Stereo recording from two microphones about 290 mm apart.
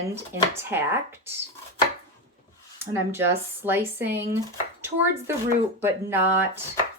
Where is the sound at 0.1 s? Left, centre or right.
Centre.